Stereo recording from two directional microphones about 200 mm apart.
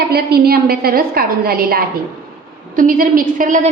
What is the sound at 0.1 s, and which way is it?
A woman's voice, 50° right (ahead or behind).